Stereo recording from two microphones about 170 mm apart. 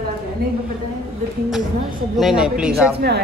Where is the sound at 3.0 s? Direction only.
70° right (ahead or behind).